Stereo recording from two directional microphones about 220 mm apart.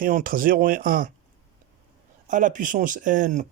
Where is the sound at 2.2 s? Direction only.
35° right (ahead or behind).